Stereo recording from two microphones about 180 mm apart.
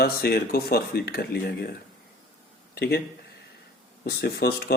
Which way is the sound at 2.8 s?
60° left (ahead or behind).